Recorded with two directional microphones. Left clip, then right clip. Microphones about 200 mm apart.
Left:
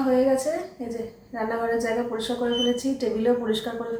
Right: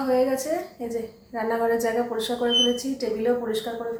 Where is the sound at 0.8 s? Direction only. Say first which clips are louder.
Right 2 dB; 25° right (ahead or behind).